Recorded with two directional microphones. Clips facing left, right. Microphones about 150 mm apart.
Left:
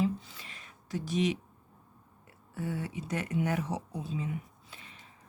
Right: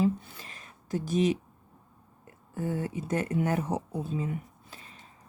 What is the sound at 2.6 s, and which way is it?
Speech, 45° right (ahead or behind).